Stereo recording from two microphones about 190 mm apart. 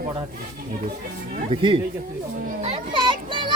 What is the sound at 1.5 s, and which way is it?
Speech, 25° right (ahead or behind).